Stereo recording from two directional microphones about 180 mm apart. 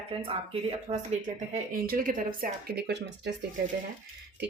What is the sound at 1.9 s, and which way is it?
Speech, 50° right (ahead or behind).